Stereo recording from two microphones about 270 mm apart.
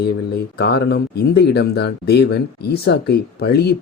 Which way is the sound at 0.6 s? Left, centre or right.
Left.